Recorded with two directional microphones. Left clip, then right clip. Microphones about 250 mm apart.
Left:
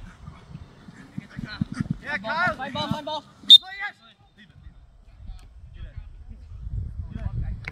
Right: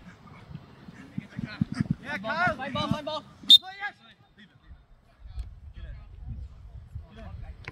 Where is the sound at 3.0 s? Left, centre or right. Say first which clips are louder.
Left 3 dB; right.